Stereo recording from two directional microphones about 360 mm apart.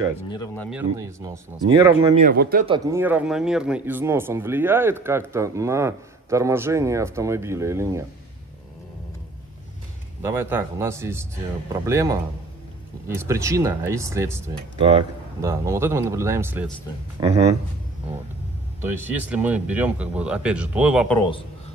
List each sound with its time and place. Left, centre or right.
0.3 s speech: centre
0.7 s speech: centre
2.0 s speech: centre
2.6 s speech: centre
10.2 s speech: centre
18.8 s speech: centre